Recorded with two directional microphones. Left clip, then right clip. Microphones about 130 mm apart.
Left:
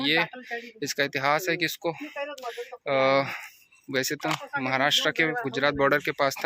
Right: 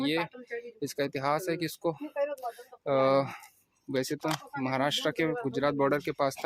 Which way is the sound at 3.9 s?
20° right (ahead or behind).